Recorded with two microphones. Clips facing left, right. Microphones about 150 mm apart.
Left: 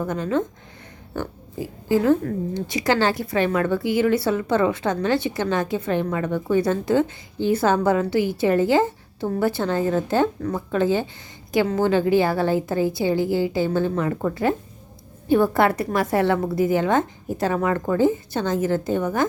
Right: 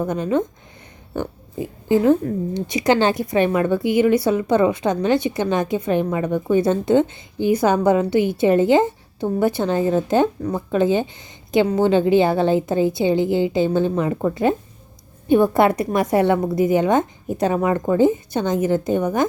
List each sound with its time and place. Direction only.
0.0 s speech: 20° right (ahead or behind)